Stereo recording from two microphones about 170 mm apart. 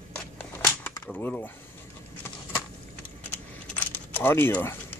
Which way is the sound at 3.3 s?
10° left (ahead or behind).